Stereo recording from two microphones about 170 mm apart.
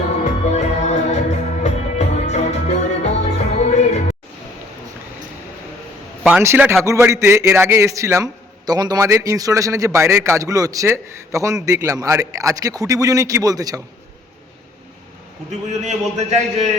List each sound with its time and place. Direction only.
0.5 s music: 40° left (ahead or behind)
6.2 s a man's voice: 10° right (ahead or behind)
15.7 s a man's voice: 40° right (ahead or behind)